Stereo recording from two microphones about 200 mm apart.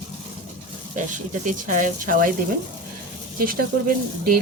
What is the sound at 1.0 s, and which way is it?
Speech, 40° right (ahead or behind).